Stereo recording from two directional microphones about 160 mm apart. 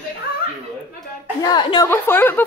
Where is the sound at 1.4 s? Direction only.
25° left (ahead or behind).